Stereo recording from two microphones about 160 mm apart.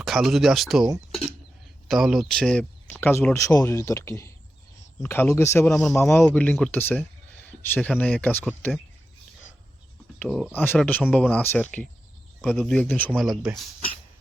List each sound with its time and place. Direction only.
0.0 s speech: centre (ahead or behind)
1.9 s speech: centre (ahead or behind)
10.2 s speech: centre (ahead or behind)